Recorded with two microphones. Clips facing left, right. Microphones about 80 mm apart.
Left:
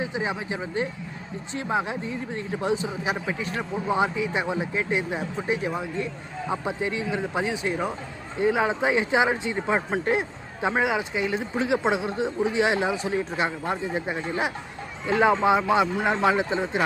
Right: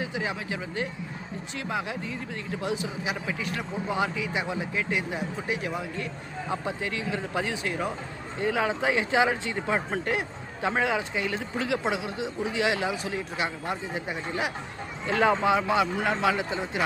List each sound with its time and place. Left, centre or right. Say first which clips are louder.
0.0 s speech: left 3 dB; left